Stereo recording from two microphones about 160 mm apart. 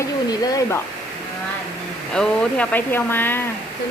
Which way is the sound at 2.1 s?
5° left (ahead or behind).